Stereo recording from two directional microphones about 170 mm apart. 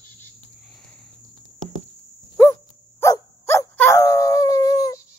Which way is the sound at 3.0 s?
15° left (ahead or behind).